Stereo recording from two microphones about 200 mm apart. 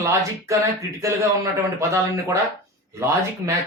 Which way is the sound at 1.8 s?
15° right (ahead or behind).